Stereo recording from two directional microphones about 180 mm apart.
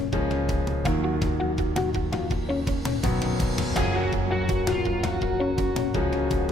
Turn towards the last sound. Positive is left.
turn(degrees=0)  # may be behind; listen again after turning